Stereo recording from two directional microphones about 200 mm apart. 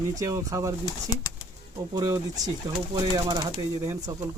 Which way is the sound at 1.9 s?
20° right (ahead or behind).